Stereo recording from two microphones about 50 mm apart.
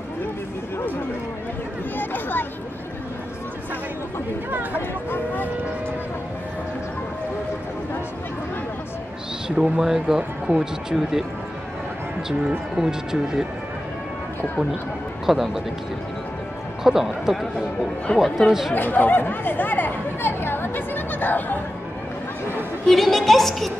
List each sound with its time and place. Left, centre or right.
2.0 s a sound: left
4.7 s speech: left
9.6 s speech: centre
12.3 s speech: centre
15.2 s speech: centre
16.8 s a woman's voice: centre
18.1 s speech: left
18.5 s speech: centre
18.8 s speech: left
22.8 s a woman's voice: centre